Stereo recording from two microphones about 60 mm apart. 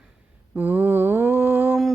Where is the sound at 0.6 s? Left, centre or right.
Right.